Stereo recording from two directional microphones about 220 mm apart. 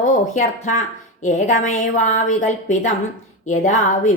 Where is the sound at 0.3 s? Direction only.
35° left (ahead or behind).